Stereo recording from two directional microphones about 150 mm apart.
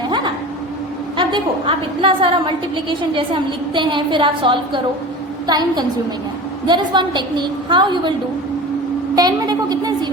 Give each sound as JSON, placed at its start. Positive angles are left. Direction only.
{"t": 1.1, "sound": "a woman's voice", "side_deg": -35}
{"t": 9.1, "sound": "a woman's voice", "side_deg": -25}